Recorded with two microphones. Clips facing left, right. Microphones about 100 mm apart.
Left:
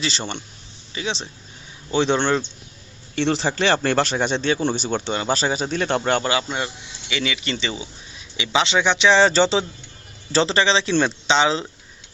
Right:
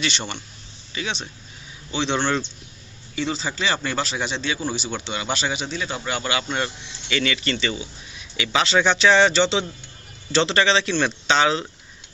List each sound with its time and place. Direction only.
0.0 s a man's voice: 30° left (ahead or behind)
1.9 s speech: 45° left (ahead or behind)
2.1 s speech: 20° left (ahead or behind)
3.2 s speech: 70° left (ahead or behind); by 5.8 s 40° left (ahead or behind)
7.1 s speech: 15° left (ahead or behind)
9.3 s a man's voice: 40° left (ahead or behind)